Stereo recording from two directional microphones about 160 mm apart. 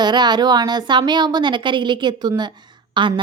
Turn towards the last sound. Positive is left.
turn(degrees=-30)  # may be behind; listen again after turning